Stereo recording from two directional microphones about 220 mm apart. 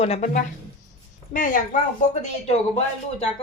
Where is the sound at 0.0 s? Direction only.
30° left (ahead or behind).